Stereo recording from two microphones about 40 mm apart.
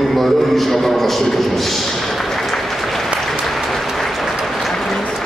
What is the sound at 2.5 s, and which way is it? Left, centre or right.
Applause, centre.